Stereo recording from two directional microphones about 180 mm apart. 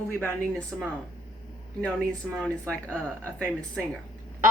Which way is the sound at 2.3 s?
5° left (ahead or behind).